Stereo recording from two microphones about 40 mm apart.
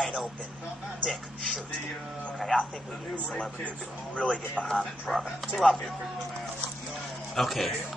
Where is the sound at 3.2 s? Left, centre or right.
Left.